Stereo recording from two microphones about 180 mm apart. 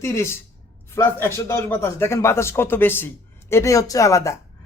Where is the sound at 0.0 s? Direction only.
15° left (ahead or behind).